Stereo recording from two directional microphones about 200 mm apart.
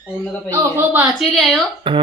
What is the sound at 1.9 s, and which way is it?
Speech, 25° right (ahead or behind).